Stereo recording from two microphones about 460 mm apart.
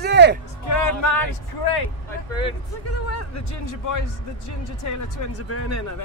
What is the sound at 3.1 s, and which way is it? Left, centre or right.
Speech, left.